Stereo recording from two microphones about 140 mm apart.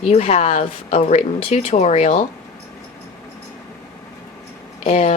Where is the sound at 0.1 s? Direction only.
50° left (ahead or behind).